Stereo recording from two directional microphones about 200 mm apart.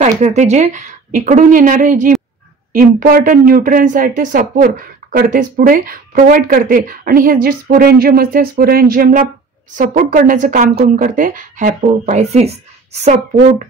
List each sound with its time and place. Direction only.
0.2 s speech: 35° right (ahead or behind)